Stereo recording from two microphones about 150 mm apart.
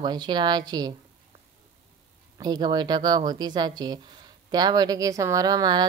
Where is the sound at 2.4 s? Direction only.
30° right (ahead or behind).